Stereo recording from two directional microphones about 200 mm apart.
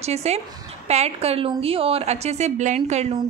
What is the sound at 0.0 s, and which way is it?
A woman's voice, 30° right (ahead or behind).